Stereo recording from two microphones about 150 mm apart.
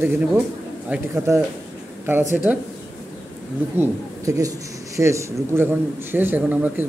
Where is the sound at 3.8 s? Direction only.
20° right (ahead or behind).